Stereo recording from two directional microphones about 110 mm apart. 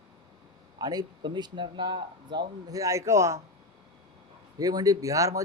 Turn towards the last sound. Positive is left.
turn(degrees=-30)  # may be behind; listen again after turning